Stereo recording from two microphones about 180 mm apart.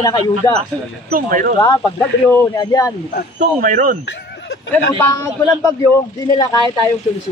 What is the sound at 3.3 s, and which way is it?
Speech, 50° right (ahead or behind).